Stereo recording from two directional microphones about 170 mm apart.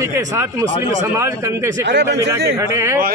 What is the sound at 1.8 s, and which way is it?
Speech, 90° right.